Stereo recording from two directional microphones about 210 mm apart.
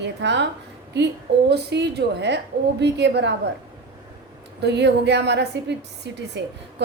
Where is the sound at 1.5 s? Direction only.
55° right (ahead or behind).